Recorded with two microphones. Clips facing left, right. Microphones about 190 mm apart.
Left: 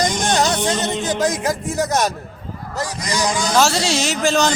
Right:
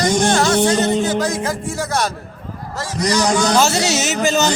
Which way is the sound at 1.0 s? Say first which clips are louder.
Even; 15° left (ahead or behind).